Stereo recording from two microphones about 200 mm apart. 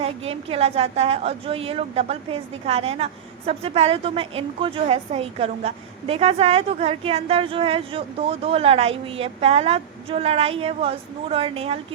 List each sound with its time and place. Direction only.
0.3 s a woman's voice: 30° right (ahead or behind)